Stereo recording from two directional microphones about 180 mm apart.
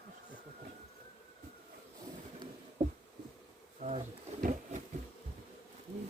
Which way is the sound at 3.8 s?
40° right (ahead or behind).